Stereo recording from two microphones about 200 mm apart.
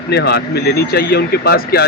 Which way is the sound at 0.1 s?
55° left (ahead or behind).